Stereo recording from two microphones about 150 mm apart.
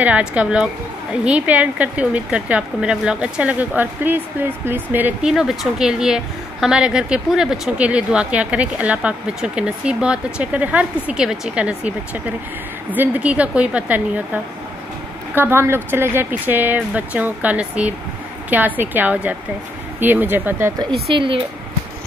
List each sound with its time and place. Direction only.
0.0 s a woman's voice: 10° right (ahead or behind)
21.1 s speech: 35° right (ahead or behind)